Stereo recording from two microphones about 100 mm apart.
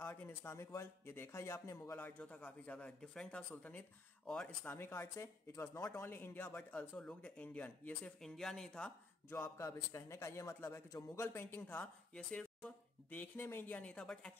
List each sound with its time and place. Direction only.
0.0 s a man's voice: 20° left (ahead or behind)
4.6 s a man's voice: 25° left (ahead or behind); by 8.9 s 5° left (ahead or behind)
9.3 s a man's voice: 25° left (ahead or behind)
11.8 s speech: 10° left (ahead or behind)